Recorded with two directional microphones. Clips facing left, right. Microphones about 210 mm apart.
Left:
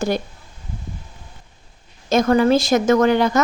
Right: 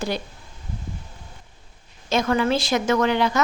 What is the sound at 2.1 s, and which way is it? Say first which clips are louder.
A woman's voice: left 6 dB; 40° left (ahead or behind).